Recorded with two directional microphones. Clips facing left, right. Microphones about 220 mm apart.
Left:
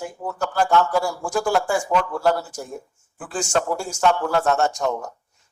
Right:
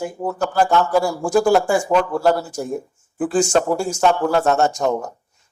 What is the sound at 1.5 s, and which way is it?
A man's voice, 20° right (ahead or behind).